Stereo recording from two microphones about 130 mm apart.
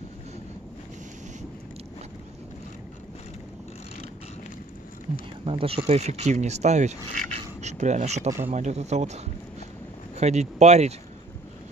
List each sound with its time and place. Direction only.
5.4 s speech: 45° right (ahead or behind)
5.9 s speech: 55° right (ahead or behind)